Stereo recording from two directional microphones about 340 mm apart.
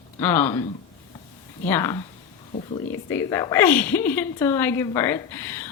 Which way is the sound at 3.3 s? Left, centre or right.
Centre.